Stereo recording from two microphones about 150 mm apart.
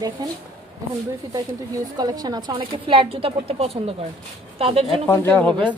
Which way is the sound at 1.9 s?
25° right (ahead or behind).